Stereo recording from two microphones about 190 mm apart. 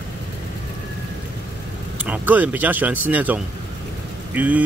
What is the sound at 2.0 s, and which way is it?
Speech, 10° right (ahead or behind).